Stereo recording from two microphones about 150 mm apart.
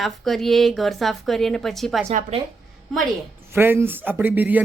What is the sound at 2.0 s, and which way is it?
Speech, 45° right (ahead or behind).